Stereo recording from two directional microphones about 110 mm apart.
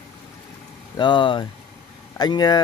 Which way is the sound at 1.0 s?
45° left (ahead or behind).